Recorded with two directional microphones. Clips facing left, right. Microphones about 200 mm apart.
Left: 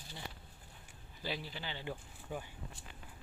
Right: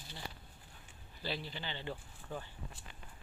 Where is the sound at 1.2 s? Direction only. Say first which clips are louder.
Even; 10° left (ahead or behind).